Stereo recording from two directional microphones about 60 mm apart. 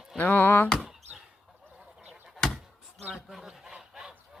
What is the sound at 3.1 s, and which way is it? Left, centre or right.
Fowl, centre.